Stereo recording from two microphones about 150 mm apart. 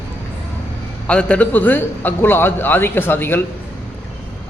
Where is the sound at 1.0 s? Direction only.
10° left (ahead or behind).